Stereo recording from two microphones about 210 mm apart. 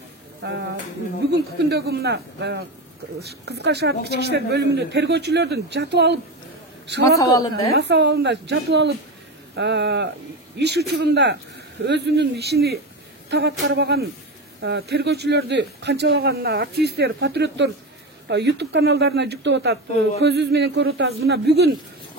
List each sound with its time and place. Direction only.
0.4 s a man's voice: 55° right (ahead or behind)
7.2 s speech: 15° left (ahead or behind)
7.7 s a woman's voice: 55° right (ahead or behind)
14.6 s a man's voice: 60° right (ahead or behind)